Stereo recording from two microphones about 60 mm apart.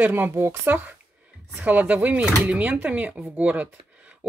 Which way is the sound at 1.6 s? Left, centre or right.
Right.